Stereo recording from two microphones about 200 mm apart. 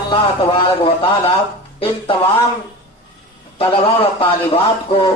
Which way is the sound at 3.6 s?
30° left (ahead or behind).